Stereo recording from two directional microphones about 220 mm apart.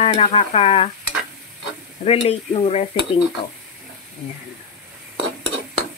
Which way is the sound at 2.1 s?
25° left (ahead or behind).